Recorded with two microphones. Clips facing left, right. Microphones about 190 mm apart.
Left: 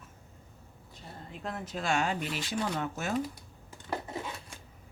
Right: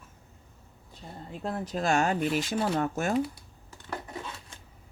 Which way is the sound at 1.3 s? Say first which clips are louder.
Right 5 dB; 35° right (ahead or behind).